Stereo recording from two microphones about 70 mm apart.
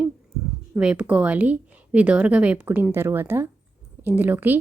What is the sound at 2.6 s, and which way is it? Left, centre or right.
A woman's voice, right.